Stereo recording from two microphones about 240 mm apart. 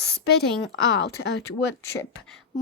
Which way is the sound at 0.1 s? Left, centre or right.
Left.